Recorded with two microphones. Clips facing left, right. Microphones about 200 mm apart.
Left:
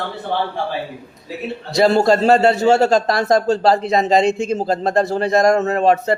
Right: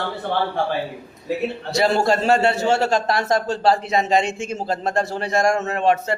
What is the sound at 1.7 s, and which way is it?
A man's voice, 40° left (ahead or behind).